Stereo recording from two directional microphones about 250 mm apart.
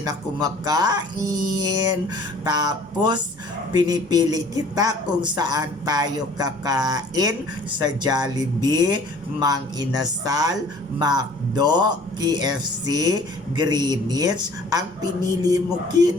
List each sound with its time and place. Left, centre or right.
0.0 s speech: centre